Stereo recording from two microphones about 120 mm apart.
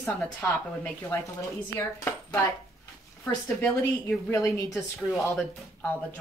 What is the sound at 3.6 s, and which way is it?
A woman's voice, 15° left (ahead or behind).